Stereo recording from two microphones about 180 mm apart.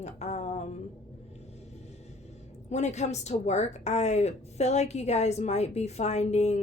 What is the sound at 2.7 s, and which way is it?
A woman's voice, 40° left (ahead or behind).